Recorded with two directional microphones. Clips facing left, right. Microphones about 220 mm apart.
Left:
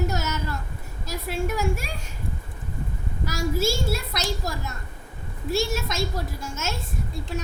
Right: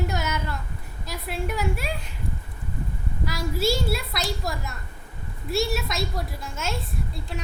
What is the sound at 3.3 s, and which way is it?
Speech, 45° left (ahead or behind).